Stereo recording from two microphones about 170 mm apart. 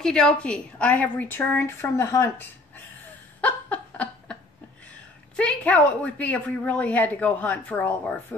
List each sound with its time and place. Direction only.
0.0 s a woman's voice: 5° left (ahead or behind)
3.3 s a sound: 10° left (ahead or behind)
5.3 s a woman's voice: 5° left (ahead or behind)